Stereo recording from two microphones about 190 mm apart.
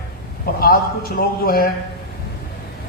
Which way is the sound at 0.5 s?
50° left (ahead or behind).